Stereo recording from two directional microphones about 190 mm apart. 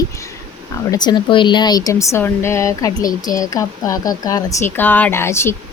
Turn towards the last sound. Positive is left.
turn(degrees=15)  # may be behind; listen again after turning